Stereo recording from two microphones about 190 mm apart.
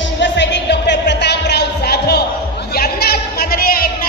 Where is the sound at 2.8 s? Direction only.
55° left (ahead or behind).